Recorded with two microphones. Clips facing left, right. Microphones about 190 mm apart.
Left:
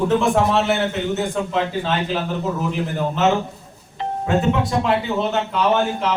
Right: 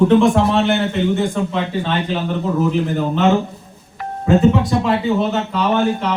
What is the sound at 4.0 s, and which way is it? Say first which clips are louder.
Music: left 2 dB; 25° left (ahead or behind).